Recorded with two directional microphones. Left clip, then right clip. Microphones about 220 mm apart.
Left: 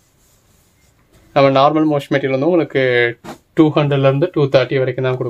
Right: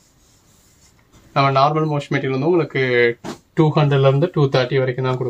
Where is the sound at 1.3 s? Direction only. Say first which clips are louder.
Left 4 dB; 50° left (ahead or behind).